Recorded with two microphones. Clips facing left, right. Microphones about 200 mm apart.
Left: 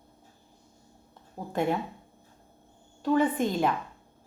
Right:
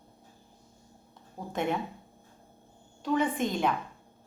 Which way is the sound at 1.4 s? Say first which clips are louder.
Left 2 dB; 20° left (ahead or behind).